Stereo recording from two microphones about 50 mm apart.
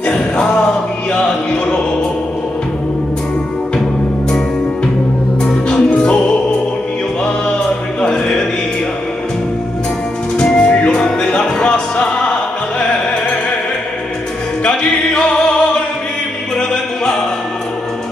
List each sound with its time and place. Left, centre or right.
0.1 s music: centre
5.4 s music: centre
10.3 s music: centre
11.0 s music: centre
14.6 s music: centre